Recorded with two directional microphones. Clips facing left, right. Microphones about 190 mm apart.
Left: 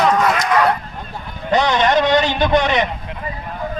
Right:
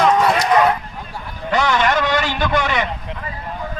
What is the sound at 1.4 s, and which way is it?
A man's voice, 20° left (ahead or behind).